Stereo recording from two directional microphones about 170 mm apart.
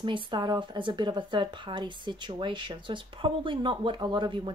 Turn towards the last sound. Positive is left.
turn(degrees=-30)  # may be behind; listen again after turning